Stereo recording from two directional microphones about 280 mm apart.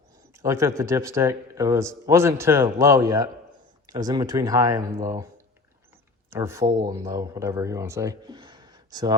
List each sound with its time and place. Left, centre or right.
0.3 s speech: centre
6.3 s speech: centre